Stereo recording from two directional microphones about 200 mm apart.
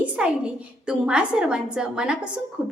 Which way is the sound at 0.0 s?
5° right (ahead or behind).